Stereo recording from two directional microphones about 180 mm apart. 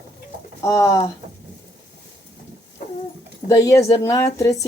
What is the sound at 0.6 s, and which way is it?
Speech, 20° left (ahead or behind).